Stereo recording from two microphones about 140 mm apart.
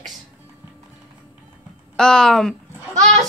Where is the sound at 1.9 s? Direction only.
5° left (ahead or behind).